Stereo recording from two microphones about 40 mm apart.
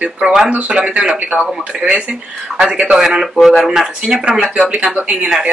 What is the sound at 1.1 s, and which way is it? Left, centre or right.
Speech, right.